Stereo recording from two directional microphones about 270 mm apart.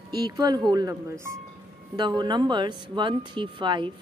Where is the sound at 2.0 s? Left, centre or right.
Centre.